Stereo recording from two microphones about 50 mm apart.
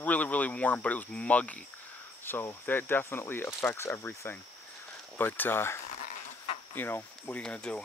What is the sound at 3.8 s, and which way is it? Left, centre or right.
Speech, left.